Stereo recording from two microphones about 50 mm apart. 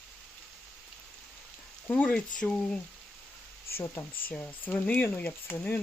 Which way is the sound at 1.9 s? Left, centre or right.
Left.